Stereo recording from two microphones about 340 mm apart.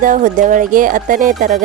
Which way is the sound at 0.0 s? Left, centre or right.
Right.